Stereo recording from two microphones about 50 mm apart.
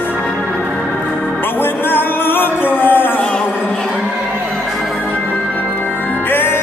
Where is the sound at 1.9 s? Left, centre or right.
Left.